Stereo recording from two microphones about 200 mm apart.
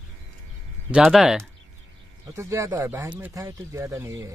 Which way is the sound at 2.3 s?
15° right (ahead or behind).